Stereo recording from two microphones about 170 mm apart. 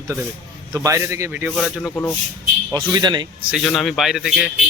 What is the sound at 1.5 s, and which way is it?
Speech, centre (ahead or behind).